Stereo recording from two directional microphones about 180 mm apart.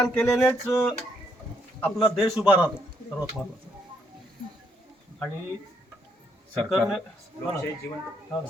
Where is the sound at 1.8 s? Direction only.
Centre (ahead or behind).